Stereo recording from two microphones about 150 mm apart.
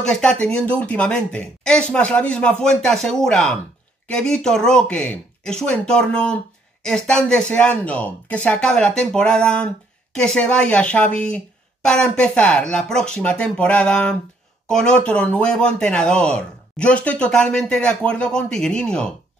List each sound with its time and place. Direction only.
0.0 s speech: 5° left (ahead or behind)